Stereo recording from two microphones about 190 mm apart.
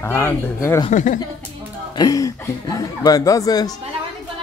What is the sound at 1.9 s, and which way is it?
Speech, 20° left (ahead or behind).